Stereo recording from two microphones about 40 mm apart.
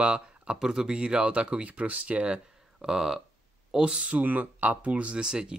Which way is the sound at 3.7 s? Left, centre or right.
Right.